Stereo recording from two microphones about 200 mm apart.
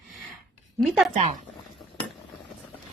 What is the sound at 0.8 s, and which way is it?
Speech, centre (ahead or behind).